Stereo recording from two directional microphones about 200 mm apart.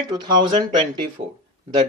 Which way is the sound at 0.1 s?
20° right (ahead or behind).